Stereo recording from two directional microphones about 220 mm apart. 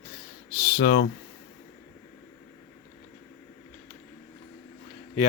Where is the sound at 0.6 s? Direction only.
45° left (ahead or behind).